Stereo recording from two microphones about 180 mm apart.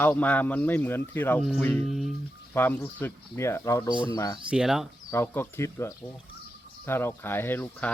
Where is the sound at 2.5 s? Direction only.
10° left (ahead or behind).